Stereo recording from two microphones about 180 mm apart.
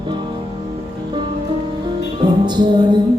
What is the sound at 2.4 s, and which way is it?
Music, 25° right (ahead or behind).